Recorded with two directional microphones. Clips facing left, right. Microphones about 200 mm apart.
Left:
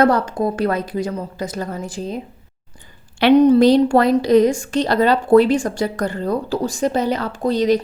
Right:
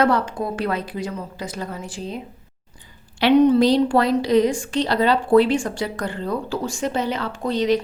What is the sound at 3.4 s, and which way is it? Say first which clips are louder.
Speech: left 4 dB; 45° left (ahead or behind).